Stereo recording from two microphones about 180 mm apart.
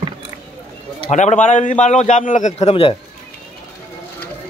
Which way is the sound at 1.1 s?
40° left (ahead or behind).